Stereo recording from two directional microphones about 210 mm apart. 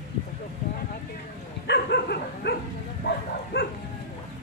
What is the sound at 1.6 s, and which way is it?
Dog, 50° left (ahead or behind).